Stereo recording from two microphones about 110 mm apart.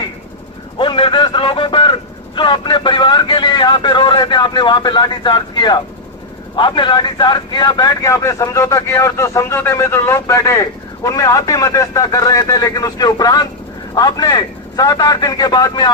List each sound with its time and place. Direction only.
0.8 s a man's voice: 50° left (ahead or behind)